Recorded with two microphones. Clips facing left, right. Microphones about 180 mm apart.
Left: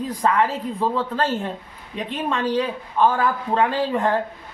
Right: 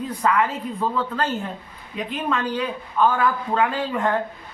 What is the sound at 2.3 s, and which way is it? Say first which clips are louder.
Speech: left 3 dB; 30° left (ahead or behind).